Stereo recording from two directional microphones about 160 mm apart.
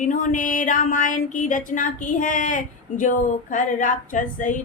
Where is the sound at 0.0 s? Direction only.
55° left (ahead or behind).